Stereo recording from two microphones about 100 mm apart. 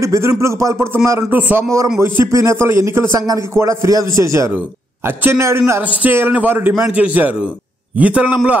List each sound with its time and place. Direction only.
0.0 s a man's voice: 30° right (ahead or behind); by 8.4 s 15° right (ahead or behind)